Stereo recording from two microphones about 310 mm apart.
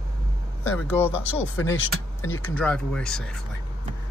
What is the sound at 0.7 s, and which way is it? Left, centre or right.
A woman's voice, centre.